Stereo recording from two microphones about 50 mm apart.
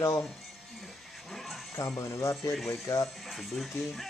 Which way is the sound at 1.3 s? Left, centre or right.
Centre.